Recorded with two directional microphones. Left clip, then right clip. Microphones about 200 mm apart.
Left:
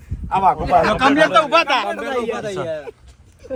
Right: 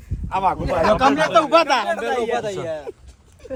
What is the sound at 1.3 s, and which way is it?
Speech, 45° right (ahead or behind).